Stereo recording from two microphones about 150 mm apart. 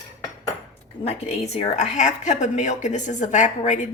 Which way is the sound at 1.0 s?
45° left (ahead or behind).